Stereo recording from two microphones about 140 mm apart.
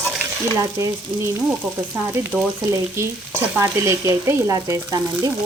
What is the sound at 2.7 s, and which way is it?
Frying, 20° right (ahead or behind).